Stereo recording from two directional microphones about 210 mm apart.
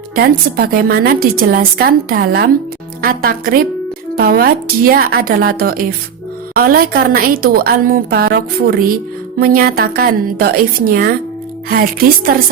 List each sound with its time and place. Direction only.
0.2 s a woman's voice: 45° right (ahead or behind)